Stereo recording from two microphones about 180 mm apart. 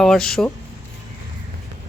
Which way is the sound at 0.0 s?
Centre (ahead or behind).